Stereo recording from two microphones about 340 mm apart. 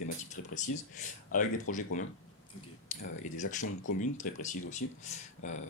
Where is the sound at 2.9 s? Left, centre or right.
Centre.